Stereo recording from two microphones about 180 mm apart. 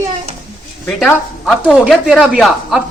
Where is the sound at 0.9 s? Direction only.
Centre (ahead or behind).